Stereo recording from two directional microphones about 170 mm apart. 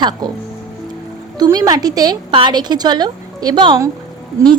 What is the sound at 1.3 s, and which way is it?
A woman's voice, 20° right (ahead or behind).